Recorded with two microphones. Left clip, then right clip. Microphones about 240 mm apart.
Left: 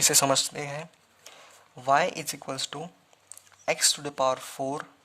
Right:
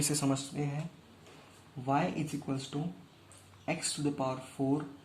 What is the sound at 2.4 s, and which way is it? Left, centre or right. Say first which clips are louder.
Speech: left 6 dB; left.